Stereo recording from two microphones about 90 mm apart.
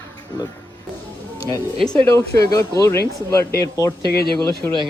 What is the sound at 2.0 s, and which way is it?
Speech, 35° left (ahead or behind).